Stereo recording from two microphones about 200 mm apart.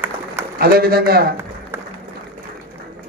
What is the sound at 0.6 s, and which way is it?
Speech, 50° right (ahead or behind).